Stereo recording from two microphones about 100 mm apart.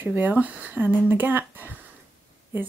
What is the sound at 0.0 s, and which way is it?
Speech, 20° right (ahead or behind).